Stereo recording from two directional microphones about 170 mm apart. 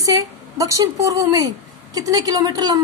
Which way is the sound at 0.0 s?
20° right (ahead or behind).